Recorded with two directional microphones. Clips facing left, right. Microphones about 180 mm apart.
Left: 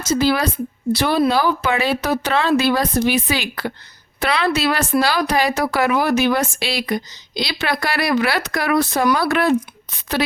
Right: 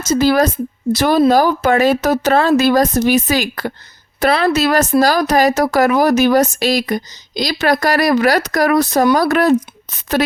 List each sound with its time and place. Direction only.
0.0 s a woman's voice: 45° right (ahead or behind)